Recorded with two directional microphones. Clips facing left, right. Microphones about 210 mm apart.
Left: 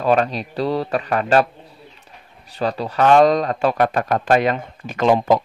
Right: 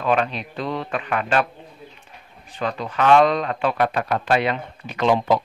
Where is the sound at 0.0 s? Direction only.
40° left (ahead or behind).